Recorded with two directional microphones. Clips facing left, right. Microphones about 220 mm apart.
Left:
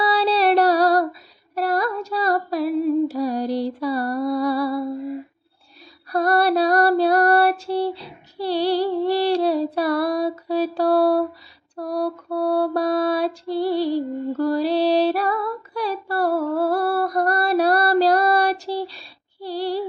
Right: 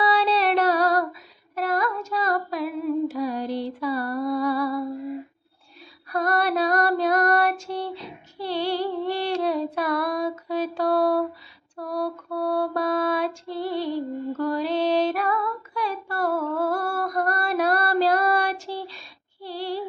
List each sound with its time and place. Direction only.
0.0 s music: 35° left (ahead or behind)
1.5 s humming: 35° left (ahead or behind)
6.1 s female singing: 35° left (ahead or behind)
11.8 s lullaby: 35° left (ahead or behind)